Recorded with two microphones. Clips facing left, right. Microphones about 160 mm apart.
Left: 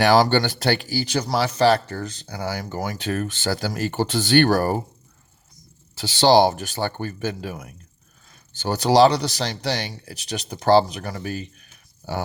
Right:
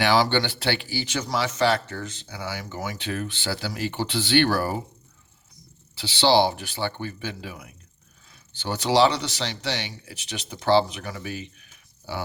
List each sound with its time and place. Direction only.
0.0 s speech: 45° left (ahead or behind)
5.9 s speech: 45° left (ahead or behind)